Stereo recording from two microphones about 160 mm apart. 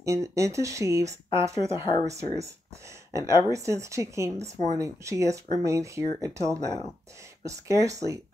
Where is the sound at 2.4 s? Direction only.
20° right (ahead or behind).